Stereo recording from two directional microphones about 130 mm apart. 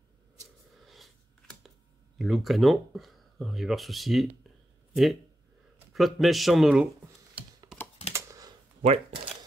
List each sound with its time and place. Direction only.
0.8 s a sound: centre (ahead or behind)
2.1 s speech: centre (ahead or behind)
5.9 s speech: centre (ahead or behind)
8.1 s typing: 25° right (ahead or behind)
8.8 s speech: 45° right (ahead or behind)